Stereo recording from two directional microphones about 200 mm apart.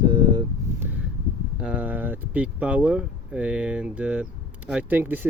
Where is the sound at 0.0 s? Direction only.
20° right (ahead or behind).